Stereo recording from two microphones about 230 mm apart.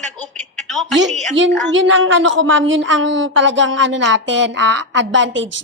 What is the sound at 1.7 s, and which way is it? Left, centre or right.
A woman's voice, right.